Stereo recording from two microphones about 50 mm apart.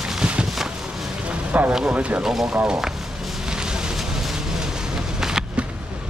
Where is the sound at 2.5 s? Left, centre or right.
Right.